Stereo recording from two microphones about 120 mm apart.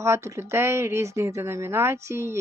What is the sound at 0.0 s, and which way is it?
A woman's voice, 25° right (ahead or behind).